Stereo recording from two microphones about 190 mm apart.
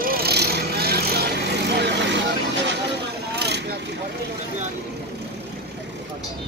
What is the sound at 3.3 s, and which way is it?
Vehicle, 60° right (ahead or behind).